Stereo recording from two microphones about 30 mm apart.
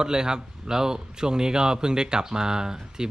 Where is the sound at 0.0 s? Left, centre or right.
Right.